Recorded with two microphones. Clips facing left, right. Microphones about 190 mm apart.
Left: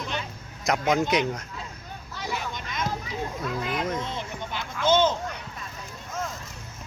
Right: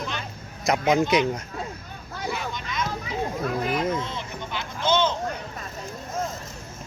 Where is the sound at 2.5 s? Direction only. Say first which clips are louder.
Right 2 dB; 50° left (ahead or behind).